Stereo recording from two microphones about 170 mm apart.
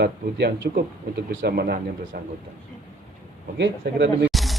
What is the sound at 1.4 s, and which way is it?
Speech, 65° right (ahead or behind).